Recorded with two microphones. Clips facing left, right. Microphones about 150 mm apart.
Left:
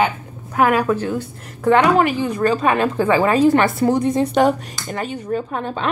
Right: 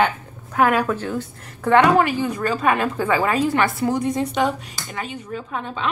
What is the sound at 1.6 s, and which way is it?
Speech, 20° left (ahead or behind).